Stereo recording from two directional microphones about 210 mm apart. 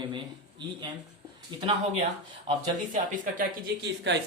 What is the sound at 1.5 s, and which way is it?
Speech, 20° right (ahead or behind).